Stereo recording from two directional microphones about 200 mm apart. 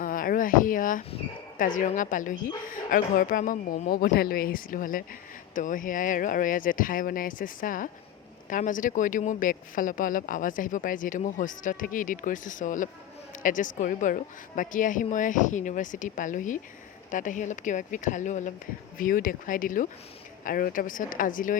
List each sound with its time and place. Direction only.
0.0 s speech: 45° left (ahead or behind)